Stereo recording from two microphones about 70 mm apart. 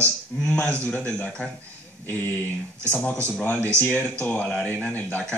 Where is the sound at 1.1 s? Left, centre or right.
Centre.